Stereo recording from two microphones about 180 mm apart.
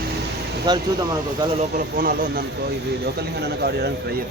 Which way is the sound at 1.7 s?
55° right (ahead or behind).